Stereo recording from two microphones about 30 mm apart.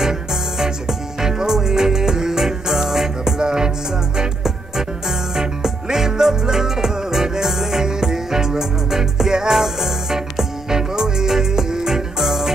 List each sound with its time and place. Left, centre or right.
0.0 s music: centre